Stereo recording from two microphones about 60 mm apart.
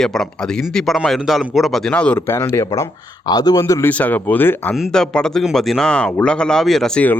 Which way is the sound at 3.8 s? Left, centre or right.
Left.